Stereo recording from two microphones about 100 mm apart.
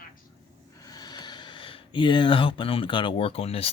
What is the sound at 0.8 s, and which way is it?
Speech, 40° left (ahead or behind).